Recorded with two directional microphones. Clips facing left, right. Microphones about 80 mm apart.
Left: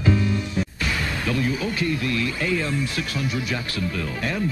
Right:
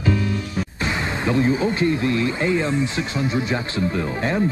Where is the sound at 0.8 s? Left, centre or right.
Right.